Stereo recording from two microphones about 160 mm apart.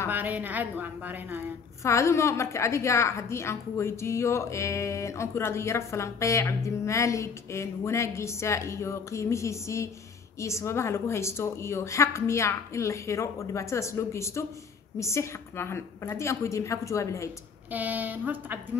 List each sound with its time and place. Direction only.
0.1 s a woman's voice: 10° right (ahead or behind)
1.8 s a woman's voice: 20° left (ahead or behind)
17.6 s a woman's voice: 10° right (ahead or behind)